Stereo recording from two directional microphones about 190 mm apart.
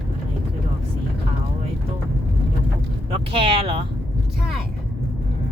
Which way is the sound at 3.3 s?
30° right (ahead or behind).